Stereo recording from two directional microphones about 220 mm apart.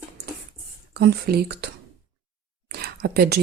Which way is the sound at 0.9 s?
45° right (ahead or behind).